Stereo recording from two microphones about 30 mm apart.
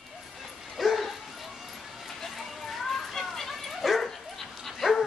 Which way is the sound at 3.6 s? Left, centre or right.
Centre.